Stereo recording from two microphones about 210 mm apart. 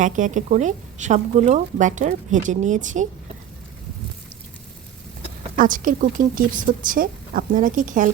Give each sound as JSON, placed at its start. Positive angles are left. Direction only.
{"t": 0.0, "sound": "speech", "side_deg": -35}
{"t": 5.5, "sound": "speech", "side_deg": -40}